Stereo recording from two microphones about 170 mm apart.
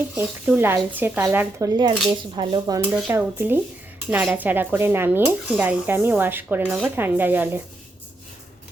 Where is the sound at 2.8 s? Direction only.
10° right (ahead or behind).